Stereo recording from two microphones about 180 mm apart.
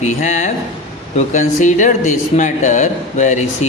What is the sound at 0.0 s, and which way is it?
Speech, 40° left (ahead or behind).